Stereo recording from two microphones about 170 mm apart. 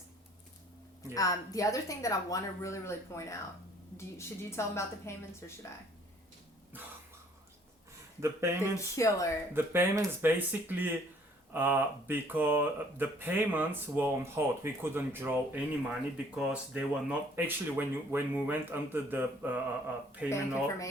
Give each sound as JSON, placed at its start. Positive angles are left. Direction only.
{"t": 1.1, "sound": "a woman's voice", "side_deg": 20}
{"t": 8.2, "sound": "speech", "side_deg": -15}
{"t": 8.7, "sound": "speech", "side_deg": 20}
{"t": 9.5, "sound": "speech", "side_deg": -15}